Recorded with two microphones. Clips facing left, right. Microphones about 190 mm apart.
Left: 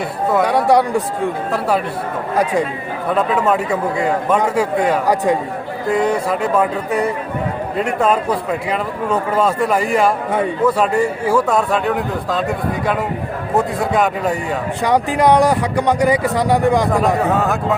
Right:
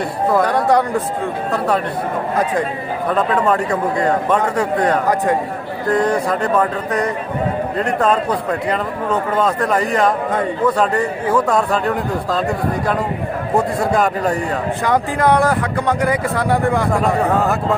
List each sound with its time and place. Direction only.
0.3 s speech: 5° left (ahead or behind)
13.6 s a man's voice: centre (ahead or behind)
14.8 s speech: 15° left (ahead or behind)
17.4 s a man's voice: centre (ahead or behind)